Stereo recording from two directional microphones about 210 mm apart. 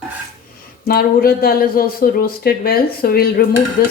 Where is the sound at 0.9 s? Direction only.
45° left (ahead or behind).